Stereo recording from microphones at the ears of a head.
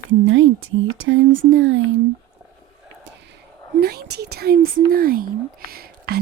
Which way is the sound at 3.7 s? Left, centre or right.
Right.